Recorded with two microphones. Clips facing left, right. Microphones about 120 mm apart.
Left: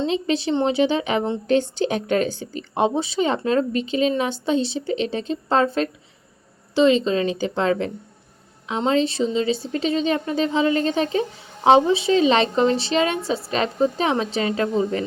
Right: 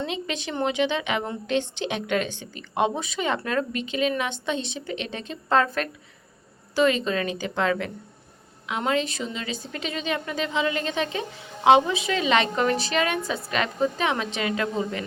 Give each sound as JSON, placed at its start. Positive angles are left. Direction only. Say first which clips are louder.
{"t": 0.0, "sound": "a woman's voice", "louder": "left 8 dB", "side_deg": 30}